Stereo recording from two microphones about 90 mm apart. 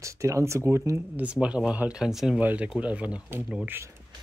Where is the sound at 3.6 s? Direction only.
25° right (ahead or behind).